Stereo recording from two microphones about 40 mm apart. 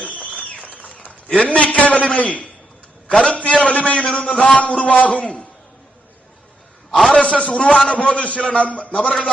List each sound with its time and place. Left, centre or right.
0.0 s a sound: left
1.4 s a man's voice: left
7.1 s a man's voice: left